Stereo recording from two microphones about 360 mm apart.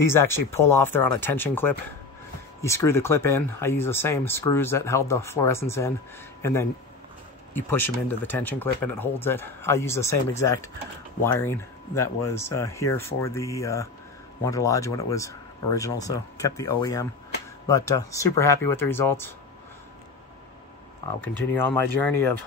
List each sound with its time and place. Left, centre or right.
0.0 s speech: centre
11.9 s speech: left
12.3 s speech: centre
21.2 s speech: centre